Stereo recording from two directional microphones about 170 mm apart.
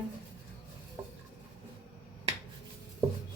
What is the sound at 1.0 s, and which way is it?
Chopping, 20° right (ahead or behind).